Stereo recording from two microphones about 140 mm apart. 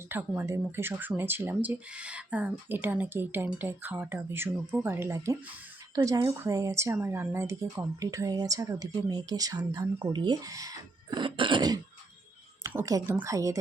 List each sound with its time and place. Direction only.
0.1 s a woman's voice: 15° right (ahead or behind)